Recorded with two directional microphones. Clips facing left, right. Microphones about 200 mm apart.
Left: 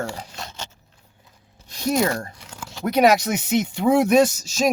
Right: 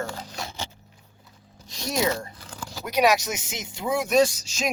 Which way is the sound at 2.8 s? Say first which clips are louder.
Left 5 dB; 55° left (ahead or behind).